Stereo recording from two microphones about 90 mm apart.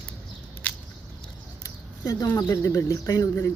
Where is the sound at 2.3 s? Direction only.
40° left (ahead or behind).